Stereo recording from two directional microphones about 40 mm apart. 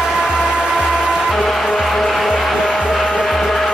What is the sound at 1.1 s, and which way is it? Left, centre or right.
Music, centre.